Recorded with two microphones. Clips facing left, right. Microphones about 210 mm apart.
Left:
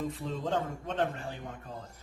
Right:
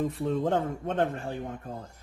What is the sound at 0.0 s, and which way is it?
A man's voice, 55° right (ahead or behind).